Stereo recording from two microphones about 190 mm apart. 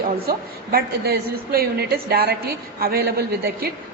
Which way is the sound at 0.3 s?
50° right (ahead or behind).